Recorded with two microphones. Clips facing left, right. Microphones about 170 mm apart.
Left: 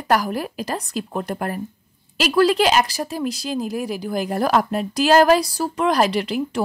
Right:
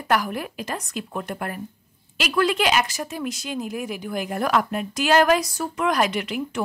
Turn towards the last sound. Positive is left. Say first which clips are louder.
# left 4 dB
turn(degrees=35)  # may be behind; listen again after turning